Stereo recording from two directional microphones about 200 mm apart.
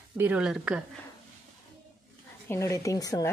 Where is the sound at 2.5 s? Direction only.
15° left (ahead or behind).